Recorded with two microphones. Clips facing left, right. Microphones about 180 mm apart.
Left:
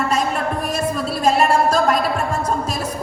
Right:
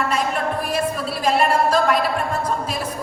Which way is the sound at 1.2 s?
45° left (ahead or behind).